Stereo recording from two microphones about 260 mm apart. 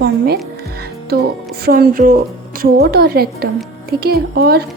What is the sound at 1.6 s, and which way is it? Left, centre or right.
A woman's voice, right.